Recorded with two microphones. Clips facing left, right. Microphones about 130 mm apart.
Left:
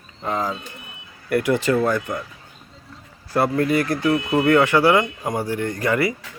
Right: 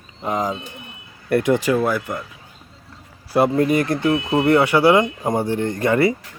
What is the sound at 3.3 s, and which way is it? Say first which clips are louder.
Speech: right 3 dB; 15° right (ahead or behind).